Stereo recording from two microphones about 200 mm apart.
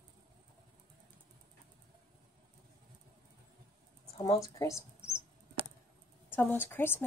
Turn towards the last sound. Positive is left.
turn(degrees=10)  # may be behind; listen again after turning